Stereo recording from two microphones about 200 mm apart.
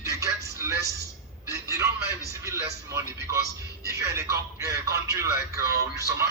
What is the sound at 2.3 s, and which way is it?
Speech, 15° right (ahead or behind).